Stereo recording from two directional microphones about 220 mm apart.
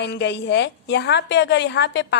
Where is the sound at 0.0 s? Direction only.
50° left (ahead or behind).